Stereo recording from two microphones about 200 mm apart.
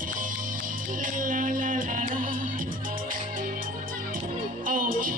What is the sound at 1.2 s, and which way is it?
Music, 40° right (ahead or behind).